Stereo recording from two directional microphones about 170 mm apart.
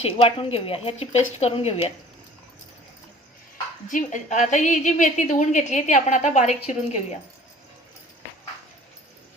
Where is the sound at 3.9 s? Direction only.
45° left (ahead or behind).